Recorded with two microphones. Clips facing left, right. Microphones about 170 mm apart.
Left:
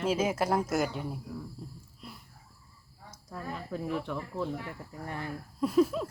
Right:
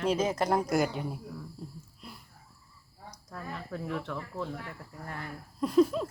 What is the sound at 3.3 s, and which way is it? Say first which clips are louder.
Speech: left 2 dB; 10° left (ahead or behind).